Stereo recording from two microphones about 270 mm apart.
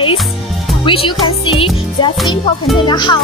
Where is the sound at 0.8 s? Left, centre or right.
Centre.